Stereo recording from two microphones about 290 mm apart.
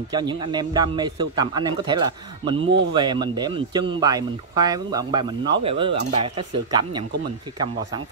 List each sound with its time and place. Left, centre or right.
0.1 s speech: centre
2.5 s speech: right
2.9 s speech: centre